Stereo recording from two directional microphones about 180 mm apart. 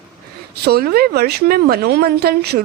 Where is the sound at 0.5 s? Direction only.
60° right (ahead or behind).